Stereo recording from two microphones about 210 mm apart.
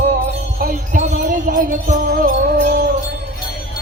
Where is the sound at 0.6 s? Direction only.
35° right (ahead or behind).